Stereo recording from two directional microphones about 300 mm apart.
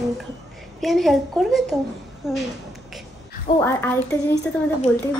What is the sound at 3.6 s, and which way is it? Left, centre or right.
Speech, centre.